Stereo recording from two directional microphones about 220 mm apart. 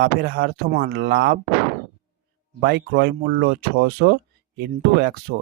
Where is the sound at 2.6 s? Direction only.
50° right (ahead or behind).